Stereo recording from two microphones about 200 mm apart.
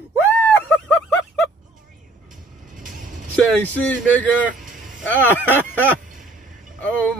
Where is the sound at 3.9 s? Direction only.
5° left (ahead or behind).